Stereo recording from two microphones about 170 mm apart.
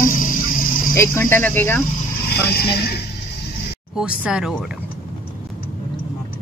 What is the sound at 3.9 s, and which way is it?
Speech, 5° right (ahead or behind).